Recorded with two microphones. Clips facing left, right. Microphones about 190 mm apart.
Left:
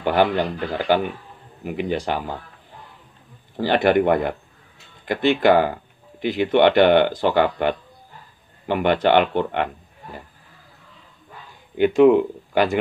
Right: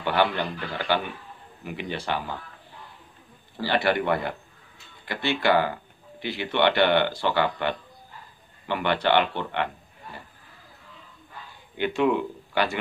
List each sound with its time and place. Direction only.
0.0 s speech: 45° left (ahead or behind)
3.5 s speech: 50° left (ahead or behind)
11.8 s speech: 40° left (ahead or behind)